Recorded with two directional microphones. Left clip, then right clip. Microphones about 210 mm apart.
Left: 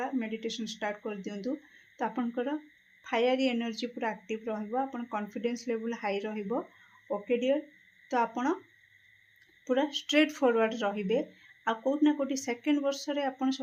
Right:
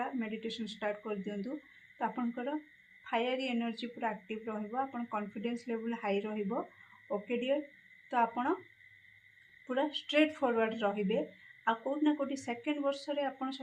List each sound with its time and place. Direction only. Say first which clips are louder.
0.0 s speech: left 4 dB; 35° left (ahead or behind)
9.6 s speech: left 5 dB; 35° left (ahead or behind)